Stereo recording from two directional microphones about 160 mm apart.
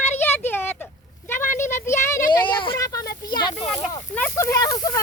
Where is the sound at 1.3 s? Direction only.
15° left (ahead or behind).